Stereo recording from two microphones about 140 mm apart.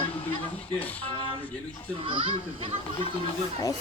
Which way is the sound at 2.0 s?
40° right (ahead or behind).